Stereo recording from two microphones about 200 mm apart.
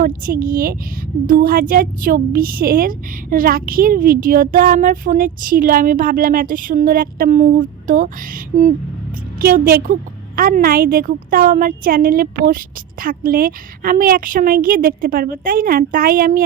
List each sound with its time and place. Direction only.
0.0 s a woman's voice: 45° right (ahead or behind)